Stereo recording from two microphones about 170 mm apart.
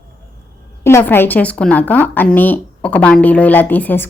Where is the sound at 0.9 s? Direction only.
15° left (ahead or behind).